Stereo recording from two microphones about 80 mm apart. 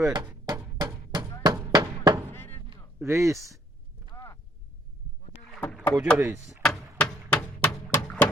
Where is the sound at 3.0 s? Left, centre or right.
Right.